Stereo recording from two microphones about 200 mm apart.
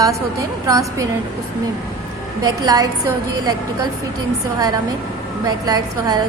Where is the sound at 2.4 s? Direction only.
20° right (ahead or behind).